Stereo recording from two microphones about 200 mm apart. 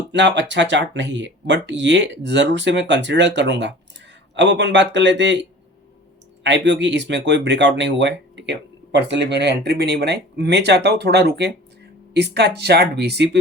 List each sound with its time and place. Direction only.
0.1 s speech: 60° right (ahead or behind)